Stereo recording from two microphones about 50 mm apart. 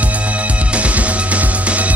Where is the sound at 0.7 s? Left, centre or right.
Right.